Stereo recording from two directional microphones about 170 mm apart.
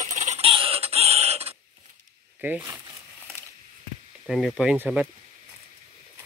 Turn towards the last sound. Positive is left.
turn(degrees=-10)  # may be behind; listen again after turning